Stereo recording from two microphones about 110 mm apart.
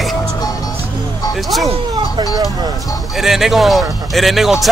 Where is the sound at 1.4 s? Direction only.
Centre (ahead or behind).